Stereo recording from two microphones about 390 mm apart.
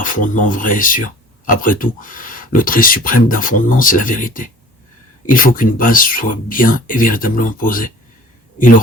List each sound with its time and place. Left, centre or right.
0.0 s a man's voice: centre